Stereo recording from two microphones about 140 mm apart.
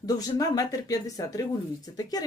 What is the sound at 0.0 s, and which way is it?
Speech, 25° left (ahead or behind).